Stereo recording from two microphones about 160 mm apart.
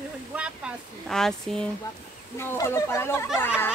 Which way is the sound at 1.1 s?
5° left (ahead or behind).